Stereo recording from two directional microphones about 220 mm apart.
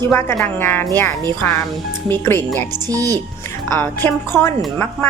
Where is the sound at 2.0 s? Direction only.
10° left (ahead or behind).